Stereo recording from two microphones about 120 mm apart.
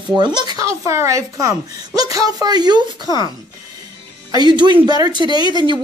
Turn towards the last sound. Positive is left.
turn(degrees=-35)  # may be behind; listen again after turning